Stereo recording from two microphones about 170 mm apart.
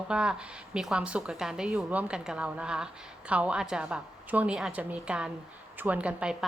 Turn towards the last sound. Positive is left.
turn(degrees=-5)  # may be behind; listen again after turning